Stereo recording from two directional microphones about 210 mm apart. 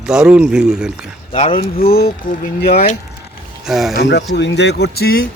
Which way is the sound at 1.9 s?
50° left (ahead or behind).